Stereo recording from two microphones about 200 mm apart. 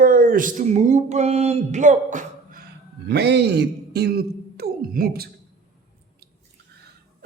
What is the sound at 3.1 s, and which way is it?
Speech, 55° right (ahead or behind).